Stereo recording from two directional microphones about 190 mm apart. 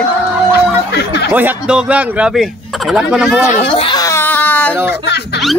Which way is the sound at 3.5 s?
30° left (ahead or behind).